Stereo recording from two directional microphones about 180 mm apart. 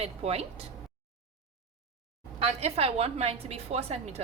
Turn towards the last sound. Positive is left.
turn(degrees=-35)  # may be behind; listen again after turning